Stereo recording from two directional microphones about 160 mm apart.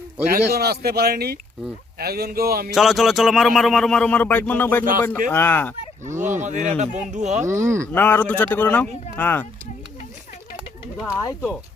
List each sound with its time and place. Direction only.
0.3 s speech: 80° right
2.7 s speech: centre (ahead or behind)
6.1 s speech: 50° right (ahead or behind)
7.4 s speech: 20° right (ahead or behind)
7.9 s speech: 10° left (ahead or behind)
10.9 s speech: 5° right (ahead or behind)